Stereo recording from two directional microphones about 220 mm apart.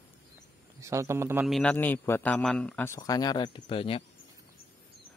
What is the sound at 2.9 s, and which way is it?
Speech, 20° left (ahead or behind).